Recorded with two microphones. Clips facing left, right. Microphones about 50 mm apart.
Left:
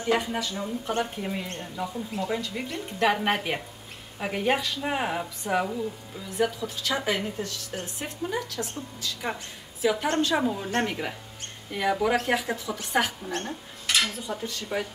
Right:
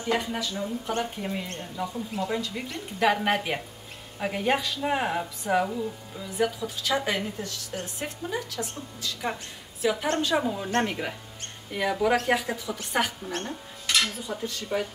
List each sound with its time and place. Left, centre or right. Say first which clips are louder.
0.0 s speech: left 2 dB; centre